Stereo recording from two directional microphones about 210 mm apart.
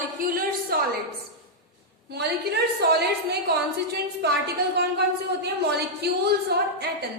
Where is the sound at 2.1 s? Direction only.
50° right (ahead or behind).